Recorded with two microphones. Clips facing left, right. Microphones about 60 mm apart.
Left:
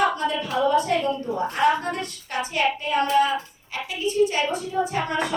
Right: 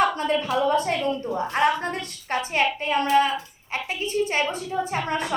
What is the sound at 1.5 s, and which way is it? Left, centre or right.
A child's voice, right.